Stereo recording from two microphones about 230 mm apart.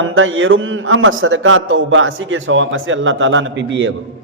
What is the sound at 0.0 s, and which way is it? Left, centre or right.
A man's voice, right.